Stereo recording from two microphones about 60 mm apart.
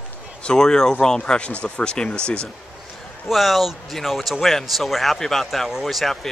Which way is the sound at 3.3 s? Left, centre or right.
Centre.